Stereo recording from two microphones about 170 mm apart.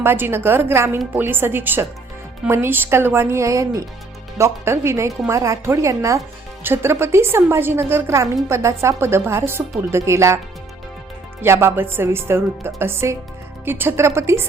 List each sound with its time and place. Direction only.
0.0 s a woman's voice: 15° right (ahead or behind)
11.4 s a woman's voice: 15° right (ahead or behind)